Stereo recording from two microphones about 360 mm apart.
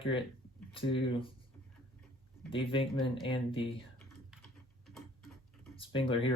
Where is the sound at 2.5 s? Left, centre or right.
Centre.